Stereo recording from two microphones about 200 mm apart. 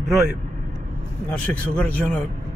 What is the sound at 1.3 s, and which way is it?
Speech, 5° left (ahead or behind).